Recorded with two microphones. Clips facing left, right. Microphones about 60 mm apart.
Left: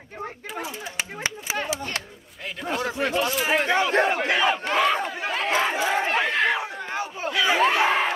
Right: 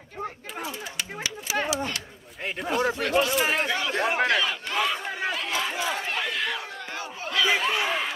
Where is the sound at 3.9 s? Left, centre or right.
Left.